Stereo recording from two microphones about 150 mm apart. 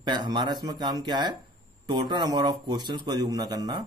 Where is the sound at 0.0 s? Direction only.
30° right (ahead or behind).